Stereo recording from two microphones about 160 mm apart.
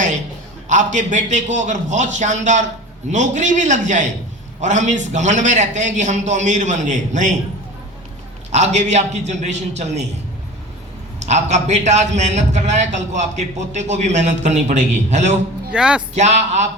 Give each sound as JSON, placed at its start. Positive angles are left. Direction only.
{"t": 0.7, "sound": "a man's voice", "side_deg": -50}
{"t": 8.5, "sound": "a man's voice", "side_deg": -45}
{"t": 11.3, "sound": "a man's voice", "side_deg": -45}
{"t": 15.7, "sound": "speech", "side_deg": -5}
{"t": 16.1, "sound": "a man's voice", "side_deg": -45}